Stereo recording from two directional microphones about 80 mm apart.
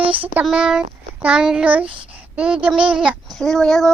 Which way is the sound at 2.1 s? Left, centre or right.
Centre.